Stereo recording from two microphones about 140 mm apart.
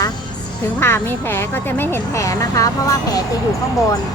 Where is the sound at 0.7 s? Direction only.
15° left (ahead or behind).